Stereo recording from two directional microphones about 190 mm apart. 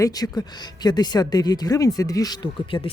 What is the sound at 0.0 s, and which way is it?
Speech, 20° left (ahead or behind).